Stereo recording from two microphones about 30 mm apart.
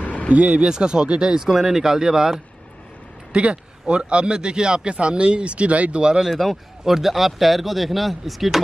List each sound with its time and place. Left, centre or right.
0.0 s a sound: left
0.7 s speech: right
1.4 s speech: centre
3.3 s speech: right
6.5 s speech: centre